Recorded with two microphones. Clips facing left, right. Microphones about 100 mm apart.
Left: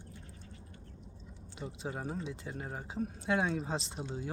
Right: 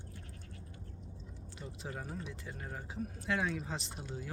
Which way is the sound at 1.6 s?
20° left (ahead or behind).